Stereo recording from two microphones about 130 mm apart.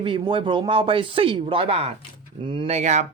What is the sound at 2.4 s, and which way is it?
Speech, 40° right (ahead or behind).